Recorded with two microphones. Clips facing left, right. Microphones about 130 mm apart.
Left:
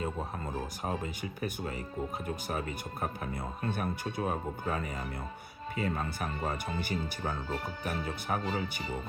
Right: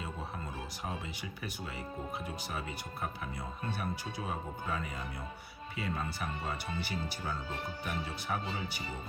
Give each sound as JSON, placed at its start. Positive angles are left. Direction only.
{"t": 0.9, "sound": "speech", "side_deg": 45}